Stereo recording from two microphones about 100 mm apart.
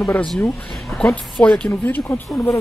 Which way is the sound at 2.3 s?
30° left (ahead or behind).